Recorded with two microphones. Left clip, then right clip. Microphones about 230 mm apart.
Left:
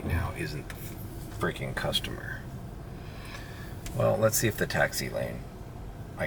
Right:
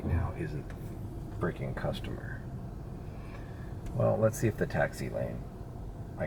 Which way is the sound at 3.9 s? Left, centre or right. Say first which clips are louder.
Left 3 dB; centre.